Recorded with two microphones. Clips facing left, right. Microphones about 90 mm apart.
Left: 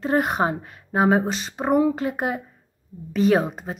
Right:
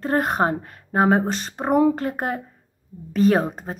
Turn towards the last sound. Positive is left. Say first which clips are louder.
# right 1 dB
turn(degrees=-40)  # may be behind; listen again after turning